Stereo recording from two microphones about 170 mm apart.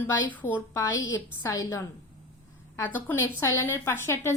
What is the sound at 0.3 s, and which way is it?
A woman's voice, 10° left (ahead or behind).